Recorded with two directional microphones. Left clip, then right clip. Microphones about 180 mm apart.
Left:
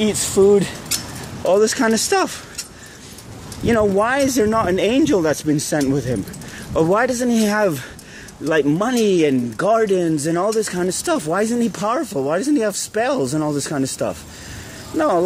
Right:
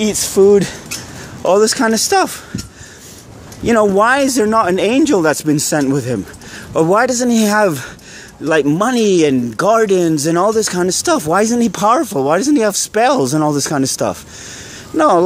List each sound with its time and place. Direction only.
0.4 s a man's voice: 35° right (ahead or behind); by 2.3 s 15° right (ahead or behind)
3.6 s a man's voice: 30° right (ahead or behind)